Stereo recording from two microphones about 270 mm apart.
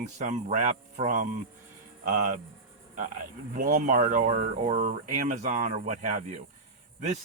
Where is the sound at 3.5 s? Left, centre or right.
Right.